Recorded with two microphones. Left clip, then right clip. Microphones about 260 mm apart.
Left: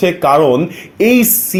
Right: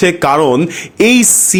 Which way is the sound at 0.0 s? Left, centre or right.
Right.